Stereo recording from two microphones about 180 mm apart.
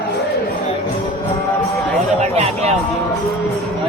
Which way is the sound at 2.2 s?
35° right (ahead or behind).